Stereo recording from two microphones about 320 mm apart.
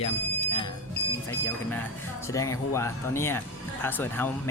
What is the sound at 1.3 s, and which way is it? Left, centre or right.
Speech, centre.